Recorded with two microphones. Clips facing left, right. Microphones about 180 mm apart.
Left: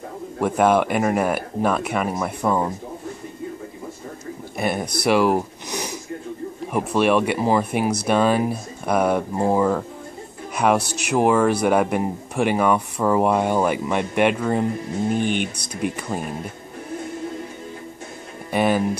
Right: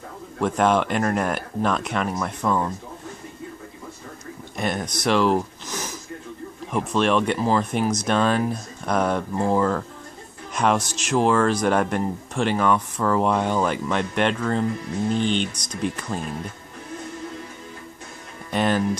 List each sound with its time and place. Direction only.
0.4 s speech: 10° left (ahead or behind)
4.6 s speech: 10° left (ahead or behind)
10.5 s music: 10° left (ahead or behind)
10.8 s speech: 60° left (ahead or behind)
11.1 s speech: 10° left (ahead or behind)
18.5 s speech: 10° left (ahead or behind)